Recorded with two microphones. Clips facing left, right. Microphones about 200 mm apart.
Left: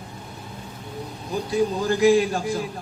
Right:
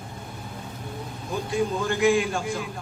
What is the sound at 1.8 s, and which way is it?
Speech, 35° left (ahead or behind).